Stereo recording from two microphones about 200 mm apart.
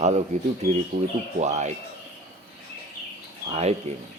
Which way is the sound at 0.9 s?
50° right (ahead or behind).